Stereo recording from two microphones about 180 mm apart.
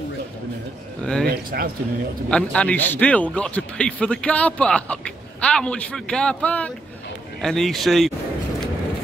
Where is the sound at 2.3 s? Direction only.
5° left (ahead or behind).